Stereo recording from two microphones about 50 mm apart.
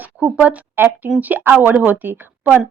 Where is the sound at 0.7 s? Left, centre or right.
Right.